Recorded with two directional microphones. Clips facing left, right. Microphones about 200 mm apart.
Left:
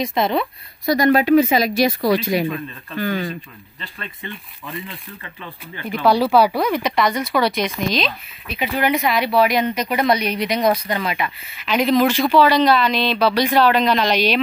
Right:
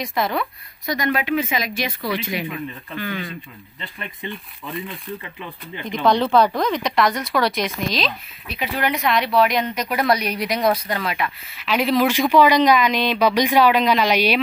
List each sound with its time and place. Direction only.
0.0 s speech: 25° left (ahead or behind)
0.9 s speech: 35° left (ahead or behind)
3.8 s speech: 15° right (ahead or behind)
5.9 s speech: 5° left (ahead or behind); by 14.4 s 10° right (ahead or behind)